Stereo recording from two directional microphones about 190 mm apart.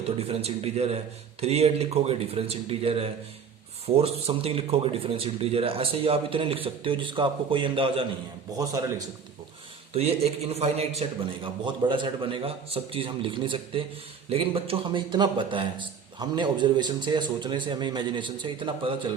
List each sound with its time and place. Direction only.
0.2 s a man's voice: 30° right (ahead or behind)
9.9 s a man's voice: 30° right (ahead or behind)